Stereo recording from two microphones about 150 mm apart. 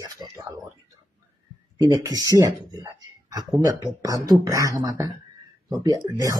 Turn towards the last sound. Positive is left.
turn(degrees=-20)  # may be behind; listen again after turning